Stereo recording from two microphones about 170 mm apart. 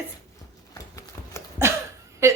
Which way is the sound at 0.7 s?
20° left (ahead or behind).